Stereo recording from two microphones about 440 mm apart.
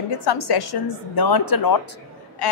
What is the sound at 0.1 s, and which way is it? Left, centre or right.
A woman's voice, left.